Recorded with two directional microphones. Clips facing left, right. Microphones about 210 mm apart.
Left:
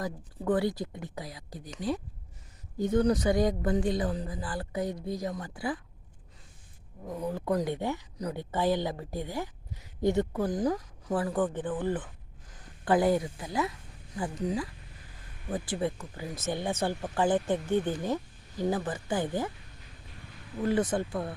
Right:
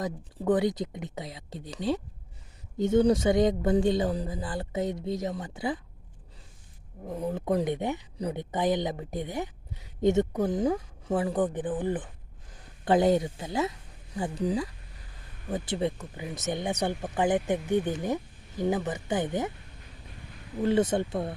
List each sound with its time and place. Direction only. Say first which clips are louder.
0.0 s speech: right 3 dB; 20° right (ahead or behind)
7.1 s speech: right 2 dB; 25° right (ahead or behind)
20.6 s speech: right 3 dB; 25° right (ahead or behind)